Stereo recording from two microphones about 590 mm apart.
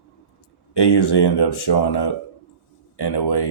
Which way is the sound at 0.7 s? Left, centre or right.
Left.